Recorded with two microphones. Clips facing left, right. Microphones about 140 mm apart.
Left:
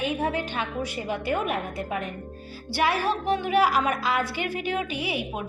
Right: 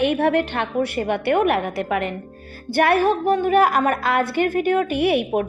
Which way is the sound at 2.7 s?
55° right (ahead or behind).